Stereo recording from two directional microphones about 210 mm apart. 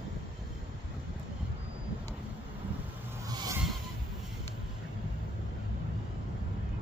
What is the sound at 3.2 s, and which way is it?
Vehicle, 20° right (ahead or behind).